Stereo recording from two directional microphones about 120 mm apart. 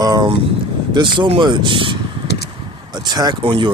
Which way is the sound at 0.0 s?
35° right (ahead or behind).